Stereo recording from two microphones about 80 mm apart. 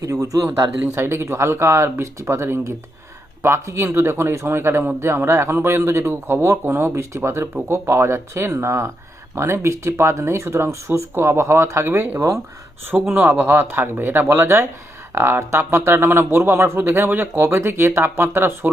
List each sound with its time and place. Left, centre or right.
0.0 s speech: right
0.9 s speech: right
13.1 s speech: right